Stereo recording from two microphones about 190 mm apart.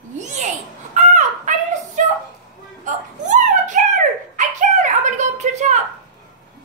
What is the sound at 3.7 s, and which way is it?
Dog, 40° right (ahead or behind).